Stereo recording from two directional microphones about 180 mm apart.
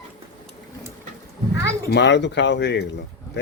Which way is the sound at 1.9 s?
75° left (ahead or behind).